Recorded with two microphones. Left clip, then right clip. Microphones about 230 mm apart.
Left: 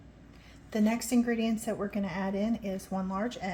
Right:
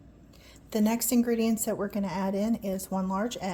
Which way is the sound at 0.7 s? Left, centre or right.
Right.